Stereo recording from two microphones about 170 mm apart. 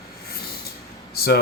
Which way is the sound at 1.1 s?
65° left (ahead or behind).